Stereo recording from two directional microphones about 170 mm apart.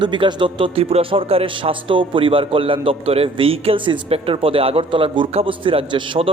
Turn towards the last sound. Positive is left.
turn(degrees=-30)  # may be behind; listen again after turning